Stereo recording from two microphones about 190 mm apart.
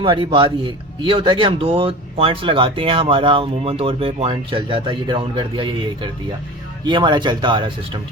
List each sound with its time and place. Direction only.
0.0 s speech: 25° right (ahead or behind)